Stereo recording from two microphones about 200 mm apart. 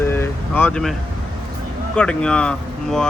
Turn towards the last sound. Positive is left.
turn(degrees=5)  # may be behind; listen again after turning